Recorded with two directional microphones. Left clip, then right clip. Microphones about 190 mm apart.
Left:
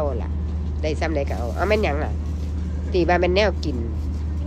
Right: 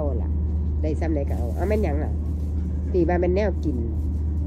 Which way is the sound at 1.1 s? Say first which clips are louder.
Left 4 dB; 45° right (ahead or behind).